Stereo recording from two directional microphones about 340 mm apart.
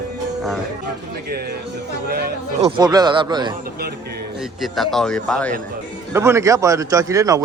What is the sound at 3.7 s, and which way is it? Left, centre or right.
Speech, right.